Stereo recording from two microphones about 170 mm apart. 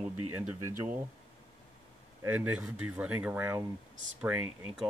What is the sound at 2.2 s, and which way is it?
Speech, 10° right (ahead or behind).